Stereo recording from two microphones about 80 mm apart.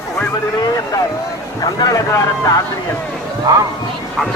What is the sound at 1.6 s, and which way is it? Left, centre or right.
Speech, left.